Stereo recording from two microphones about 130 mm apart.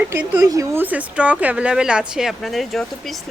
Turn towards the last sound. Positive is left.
turn(degrees=0)  # may be behind; listen again after turning